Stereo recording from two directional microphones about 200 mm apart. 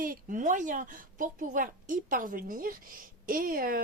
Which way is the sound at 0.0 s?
45° right (ahead or behind).